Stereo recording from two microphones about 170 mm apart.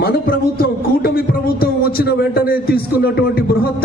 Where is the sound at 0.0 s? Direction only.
65° left (ahead or behind).